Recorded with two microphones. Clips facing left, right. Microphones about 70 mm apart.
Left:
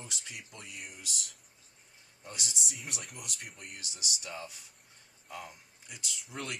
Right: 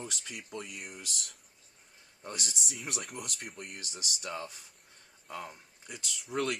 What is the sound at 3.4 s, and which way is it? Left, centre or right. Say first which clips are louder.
Speech: right 3 dB; right.